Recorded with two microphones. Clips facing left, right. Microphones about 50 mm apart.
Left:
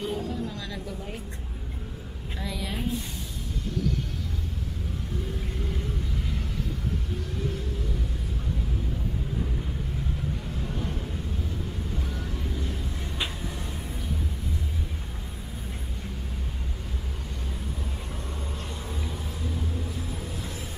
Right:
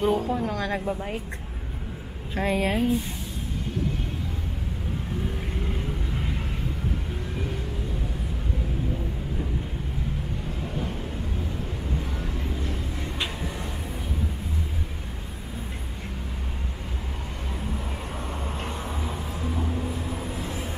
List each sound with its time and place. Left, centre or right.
0.0 s speech: right
0.8 s a woman's voice: right
2.3 s speech: right
6.1 s vehicle: right
12.1 s vehicle: right
19.0 s vehicle: right